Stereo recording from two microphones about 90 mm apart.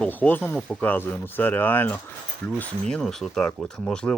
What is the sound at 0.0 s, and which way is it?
Speech, 20° left (ahead or behind).